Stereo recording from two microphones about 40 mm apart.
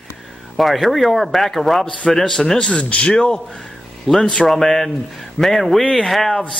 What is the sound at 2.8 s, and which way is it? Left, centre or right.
Speech, left.